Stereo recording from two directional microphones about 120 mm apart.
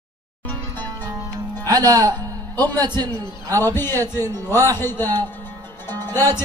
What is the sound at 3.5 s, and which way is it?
A man's voice, 20° left (ahead or behind).